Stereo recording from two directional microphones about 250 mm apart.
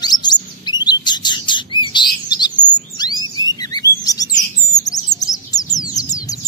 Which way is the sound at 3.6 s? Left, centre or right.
Centre.